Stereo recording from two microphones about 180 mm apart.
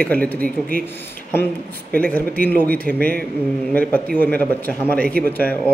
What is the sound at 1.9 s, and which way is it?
A man's voice, 10° left (ahead or behind).